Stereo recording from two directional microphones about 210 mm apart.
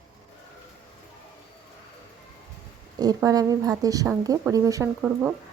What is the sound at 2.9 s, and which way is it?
A woman's voice, 20° right (ahead or behind).